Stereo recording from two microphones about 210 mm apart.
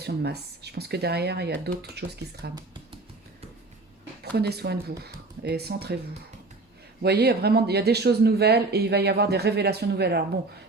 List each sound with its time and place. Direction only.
0.0 s speech: 50° right (ahead or behind)
4.2 s speech: 50° right (ahead or behind)
7.0 s speech: 50° right (ahead or behind)